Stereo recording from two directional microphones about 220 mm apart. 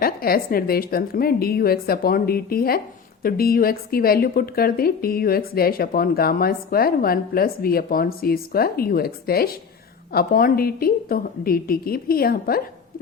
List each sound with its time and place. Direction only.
0.0 s a woman's voice: 40° left (ahead or behind)